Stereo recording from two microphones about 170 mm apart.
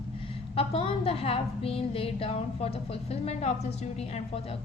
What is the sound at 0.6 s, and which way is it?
A woman's voice, 35° left (ahead or behind).